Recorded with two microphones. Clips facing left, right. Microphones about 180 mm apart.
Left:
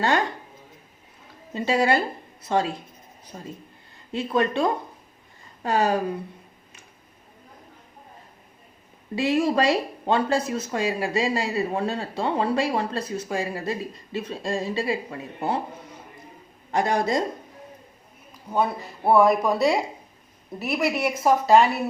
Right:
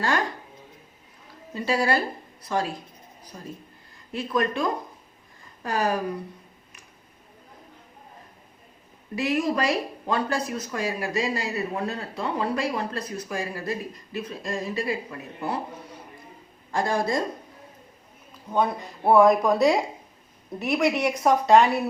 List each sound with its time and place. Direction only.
1.5 s speech: 25° left (ahead or behind)
3.3 s speech: 40° left (ahead or behind)
4.1 s speech: 25° left (ahead or behind)
9.1 s speech: 25° left (ahead or behind)
16.7 s speech: 20° left (ahead or behind)
18.5 s speech: 5° left (ahead or behind)